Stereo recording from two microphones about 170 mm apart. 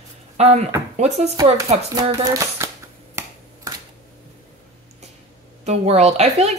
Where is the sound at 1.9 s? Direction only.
20° right (ahead or behind).